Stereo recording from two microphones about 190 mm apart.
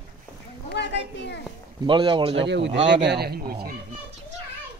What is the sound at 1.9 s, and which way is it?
Speech, 25° right (ahead or behind).